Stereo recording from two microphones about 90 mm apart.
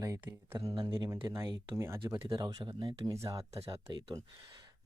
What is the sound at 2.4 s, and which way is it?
Speech, 45° right (ahead or behind).